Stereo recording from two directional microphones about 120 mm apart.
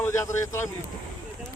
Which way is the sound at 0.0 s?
25° left (ahead or behind).